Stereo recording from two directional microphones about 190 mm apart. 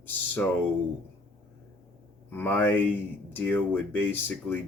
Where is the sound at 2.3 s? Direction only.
10° left (ahead or behind).